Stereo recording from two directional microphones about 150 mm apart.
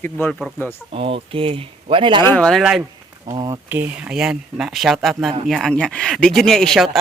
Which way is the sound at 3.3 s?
25° right (ahead or behind).